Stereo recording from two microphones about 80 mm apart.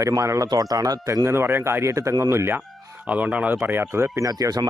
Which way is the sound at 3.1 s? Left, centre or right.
Centre.